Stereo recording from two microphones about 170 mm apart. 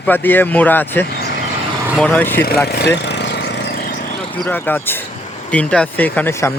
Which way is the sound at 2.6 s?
70° left (ahead or behind).